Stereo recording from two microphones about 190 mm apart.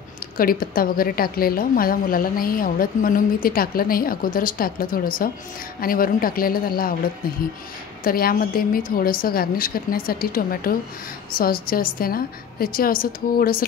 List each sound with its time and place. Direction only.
0.4 s a woman's voice: 50° left (ahead or behind)
8.0 s a woman's voice: 50° left (ahead or behind)